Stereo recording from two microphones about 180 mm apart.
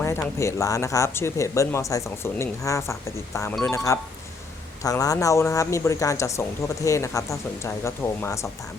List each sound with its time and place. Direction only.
0.0 s speech: 15° left (ahead or behind)